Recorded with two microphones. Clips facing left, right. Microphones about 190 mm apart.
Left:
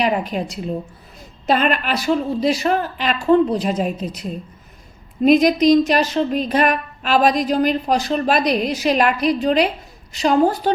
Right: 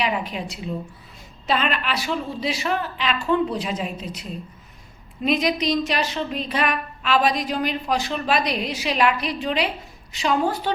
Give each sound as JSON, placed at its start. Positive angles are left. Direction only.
{"t": 0.0, "sound": "a woman's voice", "side_deg": 45}